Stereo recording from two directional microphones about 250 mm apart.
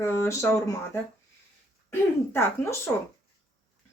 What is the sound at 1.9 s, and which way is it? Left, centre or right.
Speech, centre.